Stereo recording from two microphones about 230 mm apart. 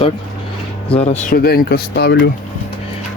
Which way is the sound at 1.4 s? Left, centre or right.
Left.